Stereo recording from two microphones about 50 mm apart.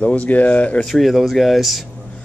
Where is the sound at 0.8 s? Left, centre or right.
Centre.